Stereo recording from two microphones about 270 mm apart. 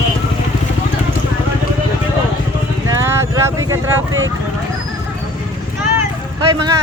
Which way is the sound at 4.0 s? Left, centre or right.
Right.